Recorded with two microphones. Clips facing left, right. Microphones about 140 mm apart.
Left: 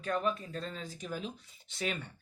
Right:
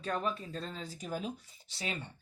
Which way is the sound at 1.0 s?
40° right (ahead or behind).